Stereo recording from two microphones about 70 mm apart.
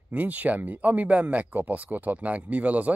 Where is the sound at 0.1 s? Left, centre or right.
Right.